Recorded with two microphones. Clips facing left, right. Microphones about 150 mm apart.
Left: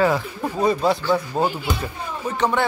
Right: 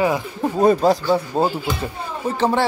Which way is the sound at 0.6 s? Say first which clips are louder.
Right 4 dB; 45° right (ahead or behind).